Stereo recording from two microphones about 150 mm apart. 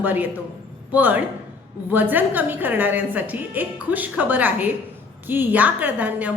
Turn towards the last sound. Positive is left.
turn(degrees=-10)  # may be behind; listen again after turning